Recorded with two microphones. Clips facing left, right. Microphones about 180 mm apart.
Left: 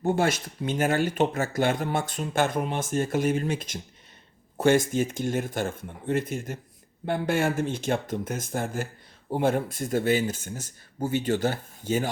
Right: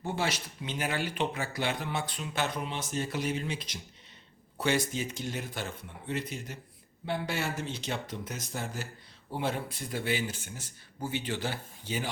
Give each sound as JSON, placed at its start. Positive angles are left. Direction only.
{"t": 0.0, "sound": "speech", "side_deg": 50}